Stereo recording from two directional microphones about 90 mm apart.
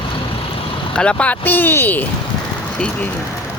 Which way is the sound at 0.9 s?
10° left (ahead or behind).